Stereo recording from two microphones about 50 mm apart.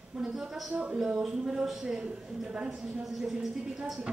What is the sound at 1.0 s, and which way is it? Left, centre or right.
Speech, centre.